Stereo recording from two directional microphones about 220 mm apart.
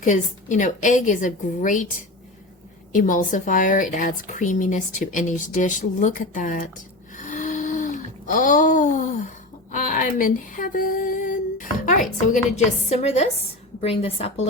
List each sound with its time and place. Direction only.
0.0 s speech: 35° left (ahead or behind)
7.2 s a sound: 35° left (ahead or behind)
9.7 s a woman's voice: 35° left (ahead or behind)